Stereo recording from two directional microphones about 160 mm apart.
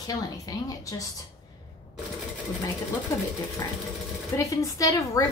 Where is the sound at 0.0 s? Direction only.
25° left (ahead or behind).